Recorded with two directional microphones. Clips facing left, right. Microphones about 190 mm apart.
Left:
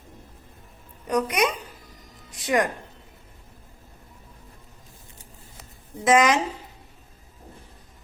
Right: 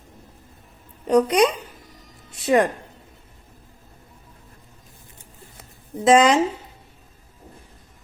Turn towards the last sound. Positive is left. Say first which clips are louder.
# right 4 dB
turn(degrees=-30)  # may be behind; listen again after turning